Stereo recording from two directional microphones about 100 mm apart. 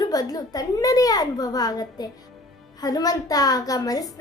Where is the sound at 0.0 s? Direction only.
40° left (ahead or behind).